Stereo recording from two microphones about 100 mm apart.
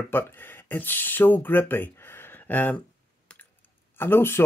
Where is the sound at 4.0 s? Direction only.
20° left (ahead or behind).